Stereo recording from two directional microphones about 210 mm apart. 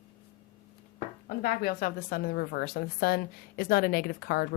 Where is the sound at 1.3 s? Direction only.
45° left (ahead or behind).